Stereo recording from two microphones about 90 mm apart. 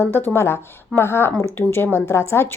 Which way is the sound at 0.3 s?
30° left (ahead or behind).